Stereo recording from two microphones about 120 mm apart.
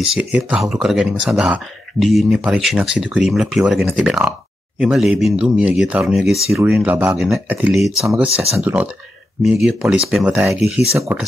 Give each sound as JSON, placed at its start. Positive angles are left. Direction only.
{"t": 0.0, "sound": "speech", "side_deg": -5}
{"t": 6.6, "sound": "speech", "side_deg": -15}
{"t": 9.4, "sound": "speech", "side_deg": 0}